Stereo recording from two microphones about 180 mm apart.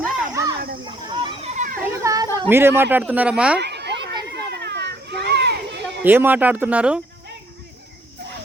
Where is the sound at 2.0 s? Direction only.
20° right (ahead or behind).